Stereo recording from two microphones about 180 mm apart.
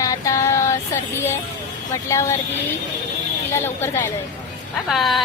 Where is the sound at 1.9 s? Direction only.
15° left (ahead or behind).